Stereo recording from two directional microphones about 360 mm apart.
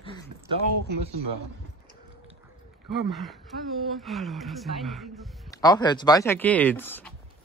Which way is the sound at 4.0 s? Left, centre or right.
Centre.